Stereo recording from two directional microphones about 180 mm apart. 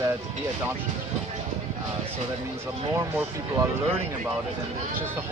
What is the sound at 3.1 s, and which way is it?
Speech, 10° right (ahead or behind).